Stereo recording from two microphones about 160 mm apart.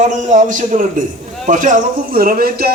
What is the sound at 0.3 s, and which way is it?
A man's voice, 55° right (ahead or behind).